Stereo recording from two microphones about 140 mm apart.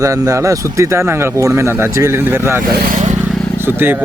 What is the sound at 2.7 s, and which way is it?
Vehicle, 70° right (ahead or behind).